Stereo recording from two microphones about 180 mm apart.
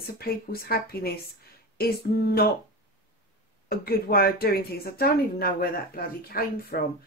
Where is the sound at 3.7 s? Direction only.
55° left (ahead or behind).